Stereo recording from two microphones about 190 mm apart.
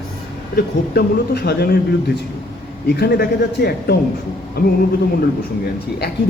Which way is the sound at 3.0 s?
60° left (ahead or behind).